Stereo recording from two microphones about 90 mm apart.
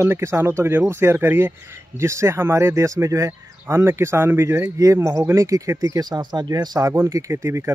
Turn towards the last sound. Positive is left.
turn(degrees=-30)  # may be behind; listen again after turning